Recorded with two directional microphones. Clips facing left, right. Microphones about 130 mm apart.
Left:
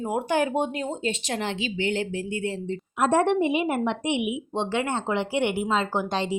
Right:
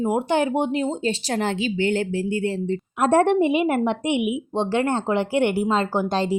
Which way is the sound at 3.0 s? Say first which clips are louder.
Right 4 dB; 50° right (ahead or behind).